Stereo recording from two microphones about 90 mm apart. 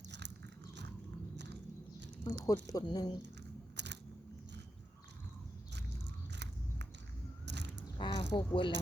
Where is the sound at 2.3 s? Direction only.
40° left (ahead or behind).